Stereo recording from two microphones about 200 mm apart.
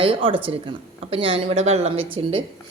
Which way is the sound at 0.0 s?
25° right (ahead or behind).